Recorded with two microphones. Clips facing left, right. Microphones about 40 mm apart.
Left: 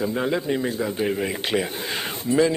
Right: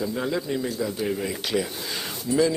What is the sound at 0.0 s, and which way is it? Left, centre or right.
Speech, left.